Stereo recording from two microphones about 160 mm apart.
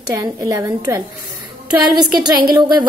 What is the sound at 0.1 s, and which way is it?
Speech, 20° right (ahead or behind).